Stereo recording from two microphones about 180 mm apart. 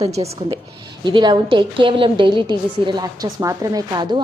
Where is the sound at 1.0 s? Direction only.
25° right (ahead or behind).